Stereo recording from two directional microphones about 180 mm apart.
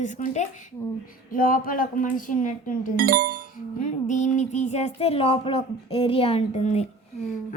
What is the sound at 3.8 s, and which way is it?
Speech, 45° left (ahead or behind).